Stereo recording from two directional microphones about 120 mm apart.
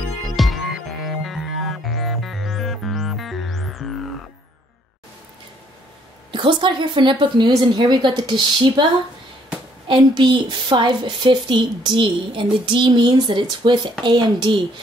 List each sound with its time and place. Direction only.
0.4 s music: centre (ahead or behind)
6.3 s a woman's voice: 45° right (ahead or behind)
9.8 s a woman's voice: 40° right (ahead or behind)